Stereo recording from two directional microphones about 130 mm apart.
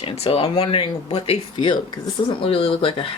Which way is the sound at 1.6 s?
35° left (ahead or behind).